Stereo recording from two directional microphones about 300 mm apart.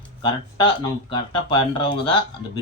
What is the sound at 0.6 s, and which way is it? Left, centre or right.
Speech, centre.